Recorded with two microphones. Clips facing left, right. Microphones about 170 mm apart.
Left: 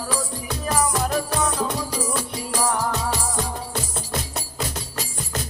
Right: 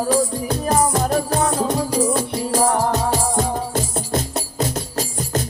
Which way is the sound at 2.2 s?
50° right (ahead or behind).